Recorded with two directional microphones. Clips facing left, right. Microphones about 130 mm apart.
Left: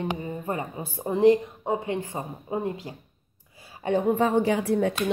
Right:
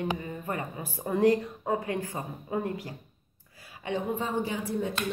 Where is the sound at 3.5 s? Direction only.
25° left (ahead or behind).